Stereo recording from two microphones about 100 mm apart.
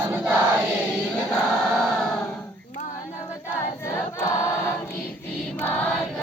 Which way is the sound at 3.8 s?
25° left (ahead or behind).